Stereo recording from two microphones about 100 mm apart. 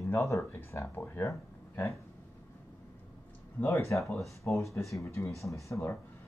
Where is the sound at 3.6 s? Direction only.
20° left (ahead or behind).